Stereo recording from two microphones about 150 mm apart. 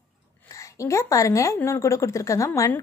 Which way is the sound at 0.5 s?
20° left (ahead or behind).